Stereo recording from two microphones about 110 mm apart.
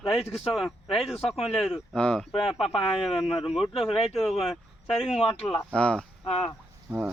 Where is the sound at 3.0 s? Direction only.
Centre (ahead or behind).